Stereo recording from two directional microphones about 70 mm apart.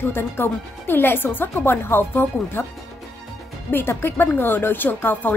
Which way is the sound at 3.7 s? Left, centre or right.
Left.